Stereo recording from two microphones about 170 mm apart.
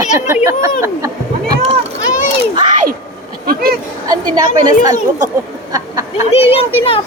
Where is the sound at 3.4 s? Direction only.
60° right (ahead or behind).